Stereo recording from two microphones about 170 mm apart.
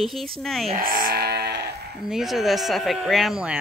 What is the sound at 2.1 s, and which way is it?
Speech, centre (ahead or behind).